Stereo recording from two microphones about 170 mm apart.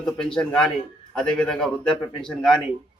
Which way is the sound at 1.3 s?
5° left (ahead or behind).